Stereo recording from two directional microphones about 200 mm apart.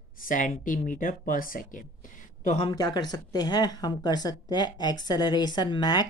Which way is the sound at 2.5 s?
25° left (ahead or behind).